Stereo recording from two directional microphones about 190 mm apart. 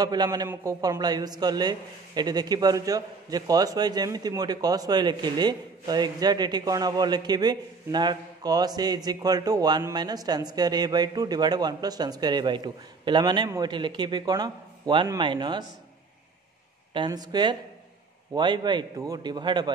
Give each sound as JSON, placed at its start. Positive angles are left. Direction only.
{"t": 0.0, "sound": "a man's voice", "side_deg": -20}
{"t": 16.9, "sound": "a man's voice", "side_deg": -20}